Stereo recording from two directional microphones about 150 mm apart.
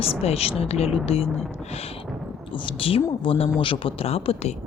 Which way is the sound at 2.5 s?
35° left (ahead or behind).